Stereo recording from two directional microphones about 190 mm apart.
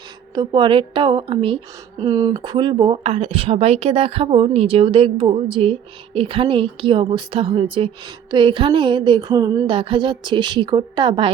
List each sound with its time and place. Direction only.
0.3 s a woman's voice: 25° right (ahead or behind)